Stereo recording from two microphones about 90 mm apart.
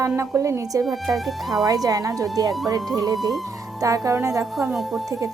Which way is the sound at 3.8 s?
40° right (ahead or behind).